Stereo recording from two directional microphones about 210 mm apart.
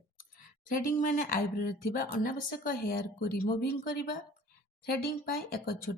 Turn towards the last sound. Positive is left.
turn(degrees=45)  # may be behind; listen again after turning